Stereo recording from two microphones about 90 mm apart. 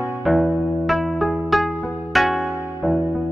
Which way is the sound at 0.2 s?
Centre (ahead or behind).